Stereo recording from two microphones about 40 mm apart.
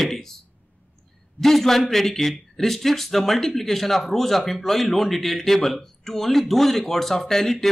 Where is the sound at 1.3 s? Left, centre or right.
Centre.